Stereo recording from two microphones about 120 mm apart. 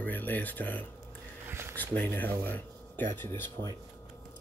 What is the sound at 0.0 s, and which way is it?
Speech, 15° left (ahead or behind).